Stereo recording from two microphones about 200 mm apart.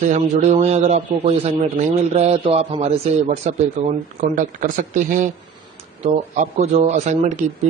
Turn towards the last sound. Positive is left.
turn(degrees=-35)  # may be behind; listen again after turning